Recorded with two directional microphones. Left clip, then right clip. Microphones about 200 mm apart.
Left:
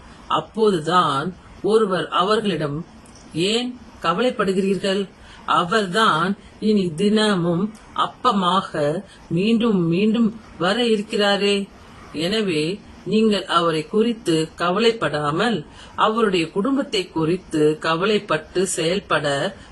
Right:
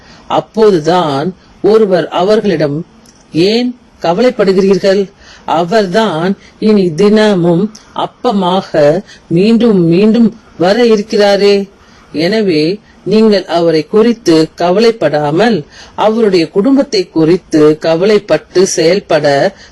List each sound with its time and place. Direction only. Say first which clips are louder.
0.3 s speech: right 10 dB; 30° right (ahead or behind)